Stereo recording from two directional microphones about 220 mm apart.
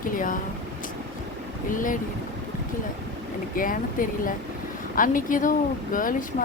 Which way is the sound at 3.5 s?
40° left (ahead or behind).